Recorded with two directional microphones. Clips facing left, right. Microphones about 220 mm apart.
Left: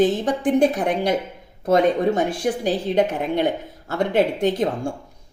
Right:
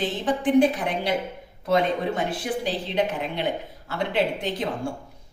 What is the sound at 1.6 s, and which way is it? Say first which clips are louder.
Speech: left 5 dB; 45° left (ahead or behind).